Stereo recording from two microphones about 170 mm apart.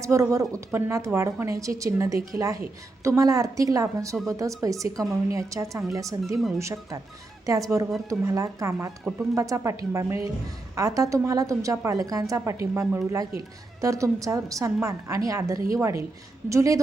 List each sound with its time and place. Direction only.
0.0 s a woman's voice: 15° right (ahead or behind)
7.9 s speech: centre (ahead or behind)
8.2 s a woman's voice: 20° right (ahead or behind)